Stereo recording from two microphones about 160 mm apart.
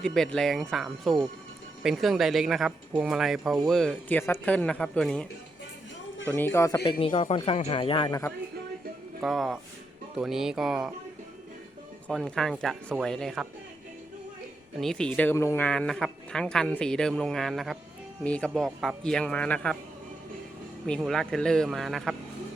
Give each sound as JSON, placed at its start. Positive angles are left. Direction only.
{"t": 0.0, "sound": "speech", "side_deg": 5}
{"t": 7.0, "sound": "speech", "side_deg": 35}
{"t": 9.2, "sound": "speech", "side_deg": 0}
{"t": 12.0, "sound": "speech", "side_deg": 5}
{"t": 14.8, "sound": "speech", "side_deg": 5}
{"t": 20.8, "sound": "speech", "side_deg": 5}